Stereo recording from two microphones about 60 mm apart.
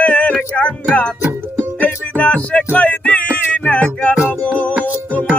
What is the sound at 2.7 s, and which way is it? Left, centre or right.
Music, left.